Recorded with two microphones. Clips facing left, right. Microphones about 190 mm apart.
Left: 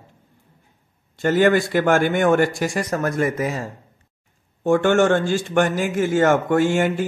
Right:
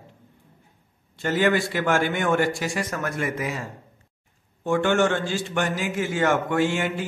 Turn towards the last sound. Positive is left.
turn(degrees=45)  # may be behind; listen again after turning